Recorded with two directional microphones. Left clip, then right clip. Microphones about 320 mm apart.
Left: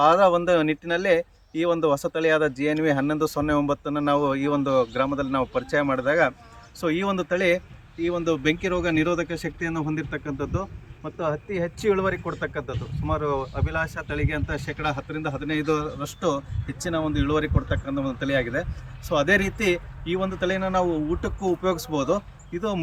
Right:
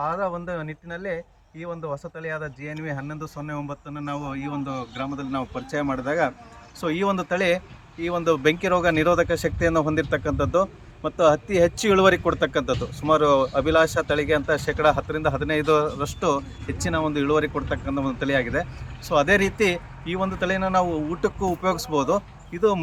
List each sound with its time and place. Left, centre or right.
0.0 s speech: left
1.5 s speech: left; by 22.8 s centre